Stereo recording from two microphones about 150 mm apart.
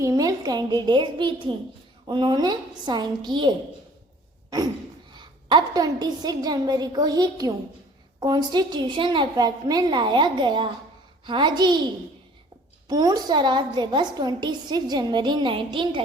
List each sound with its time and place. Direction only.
0.0 s a woman's voice: 25° right (ahead or behind)
5.1 s a woman's voice: 30° right (ahead or behind)
12.9 s a woman's voice: 25° right (ahead or behind)